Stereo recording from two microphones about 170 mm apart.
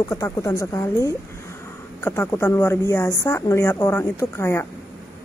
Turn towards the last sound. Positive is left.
turn(degrees=15)  # may be behind; listen again after turning